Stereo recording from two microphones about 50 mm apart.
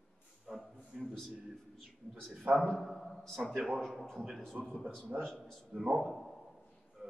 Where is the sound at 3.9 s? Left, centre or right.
Centre.